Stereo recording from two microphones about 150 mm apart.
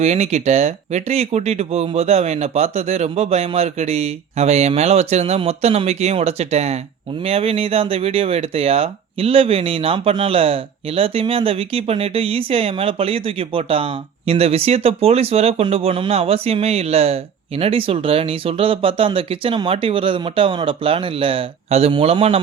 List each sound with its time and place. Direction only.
0.0 s speech: 45° right (ahead or behind)